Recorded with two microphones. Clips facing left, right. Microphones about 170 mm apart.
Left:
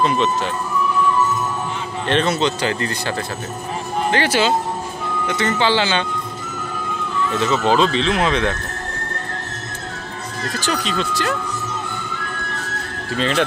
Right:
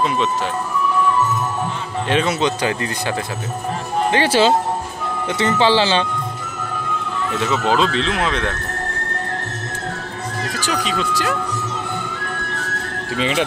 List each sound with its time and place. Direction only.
0.0 s speech: 5° right (ahead or behind)
2.0 s a man's voice: 10° right (ahead or behind)
4.1 s speech: 30° right (ahead or behind)
7.3 s speech: 5° right (ahead or behind)
10.6 s a man's voice: 10° right (ahead or behind)
13.1 s a man's voice: 10° right (ahead or behind)